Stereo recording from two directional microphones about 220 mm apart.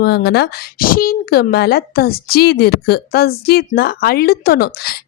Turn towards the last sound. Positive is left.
turn(degrees=45)  # may be behind; listen again after turning